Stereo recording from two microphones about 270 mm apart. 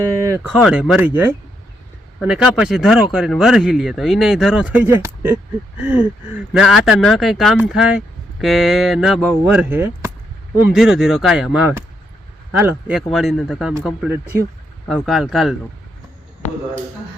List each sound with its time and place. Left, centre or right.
0.3 s speech: centre